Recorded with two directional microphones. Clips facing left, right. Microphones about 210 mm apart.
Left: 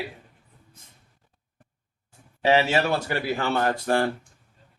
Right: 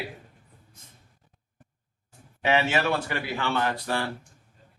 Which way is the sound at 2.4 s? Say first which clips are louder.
Left 3 dB; 35° left (ahead or behind).